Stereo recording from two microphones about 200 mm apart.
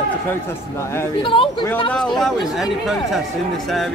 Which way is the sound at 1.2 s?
25° left (ahead or behind).